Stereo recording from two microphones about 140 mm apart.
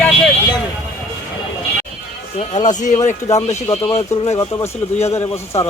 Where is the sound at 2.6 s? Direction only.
60° left (ahead or behind).